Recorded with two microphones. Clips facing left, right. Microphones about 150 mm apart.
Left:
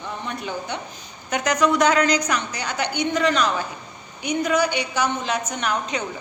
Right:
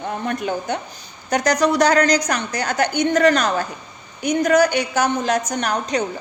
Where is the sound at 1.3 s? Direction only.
35° right (ahead or behind).